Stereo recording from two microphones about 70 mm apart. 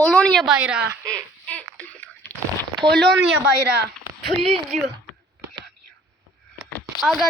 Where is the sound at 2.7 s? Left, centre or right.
Right.